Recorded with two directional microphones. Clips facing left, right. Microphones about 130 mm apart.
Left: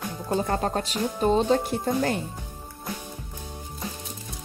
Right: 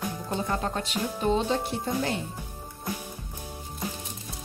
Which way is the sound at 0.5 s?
40° left (ahead or behind).